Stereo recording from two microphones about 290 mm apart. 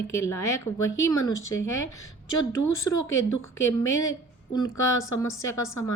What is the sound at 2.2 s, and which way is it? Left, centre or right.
Speech, left.